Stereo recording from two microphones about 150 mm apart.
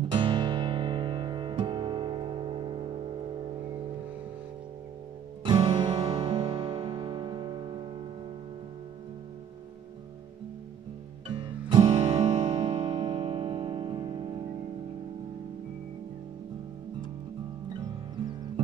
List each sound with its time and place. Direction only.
0.1 s music: 30° right (ahead or behind)
5.4 s music: 30° right (ahead or behind)
11.2 s music: 30° right (ahead or behind)